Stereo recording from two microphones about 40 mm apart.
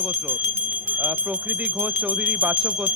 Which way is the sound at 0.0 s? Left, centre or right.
Right.